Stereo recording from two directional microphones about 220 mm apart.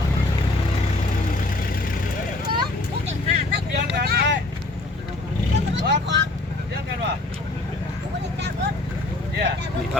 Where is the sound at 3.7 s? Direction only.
45° right (ahead or behind).